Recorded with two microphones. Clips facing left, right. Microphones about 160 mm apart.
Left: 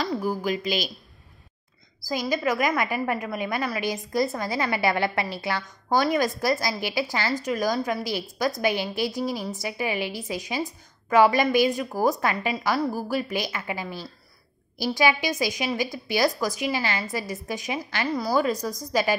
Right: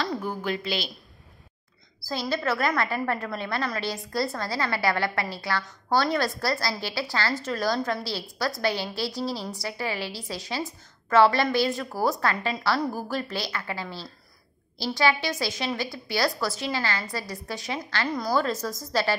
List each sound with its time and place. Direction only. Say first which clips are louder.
0.0 s speech: left 3 dB; 10° left (ahead or behind)
2.0 s a woman's voice: left 2 dB; 15° left (ahead or behind)